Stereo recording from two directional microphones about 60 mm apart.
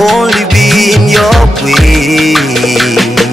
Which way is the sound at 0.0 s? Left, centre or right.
Centre.